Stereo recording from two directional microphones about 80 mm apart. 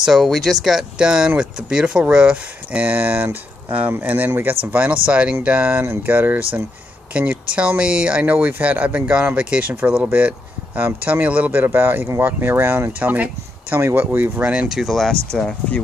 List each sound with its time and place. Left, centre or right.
0.0 s speech: centre
14.7 s speech: centre